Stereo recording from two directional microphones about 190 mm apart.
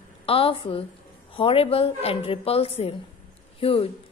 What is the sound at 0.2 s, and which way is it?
A woman's voice, 30° left (ahead or behind).